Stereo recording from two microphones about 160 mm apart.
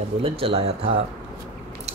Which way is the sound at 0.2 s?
35° right (ahead or behind).